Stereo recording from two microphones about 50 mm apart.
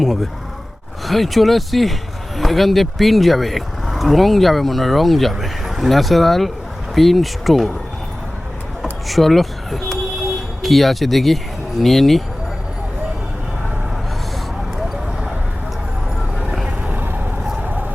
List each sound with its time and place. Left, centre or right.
0.0 s speech: centre
8.8 s a sound: centre
10.6 s speech: centre
16.6 s vehicle: right